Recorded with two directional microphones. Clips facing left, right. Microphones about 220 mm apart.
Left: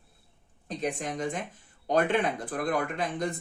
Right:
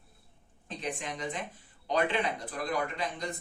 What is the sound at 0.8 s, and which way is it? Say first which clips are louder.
Speech: left 5 dB; 45° left (ahead or behind).